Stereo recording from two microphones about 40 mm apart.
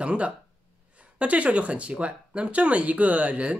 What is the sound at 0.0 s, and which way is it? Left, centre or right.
Speech, right.